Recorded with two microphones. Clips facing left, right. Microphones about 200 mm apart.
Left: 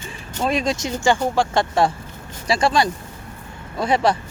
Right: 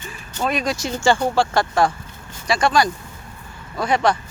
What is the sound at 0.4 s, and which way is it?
Speech, 25° left (ahead or behind).